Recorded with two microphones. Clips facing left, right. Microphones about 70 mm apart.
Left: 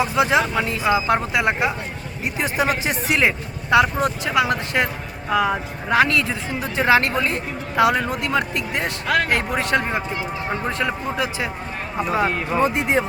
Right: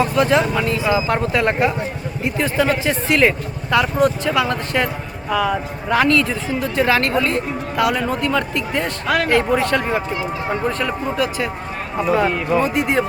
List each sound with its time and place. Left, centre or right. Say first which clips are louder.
0.0 s speech: right 2 dB; centre
9.0 s speech: right 1 dB; centre
9.3 s speech: right 4 dB; centre